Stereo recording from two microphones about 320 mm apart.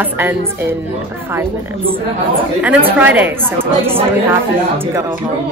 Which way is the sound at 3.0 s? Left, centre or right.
Centre.